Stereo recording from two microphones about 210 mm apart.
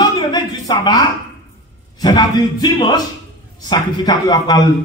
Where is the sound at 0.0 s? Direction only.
20° left (ahead or behind).